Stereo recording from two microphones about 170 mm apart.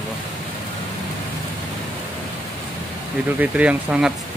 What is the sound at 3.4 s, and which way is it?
Speech, 10° right (ahead or behind).